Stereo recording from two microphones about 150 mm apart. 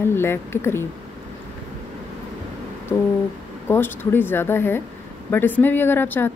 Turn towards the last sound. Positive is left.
turn(degrees=15)  # may be behind; listen again after turning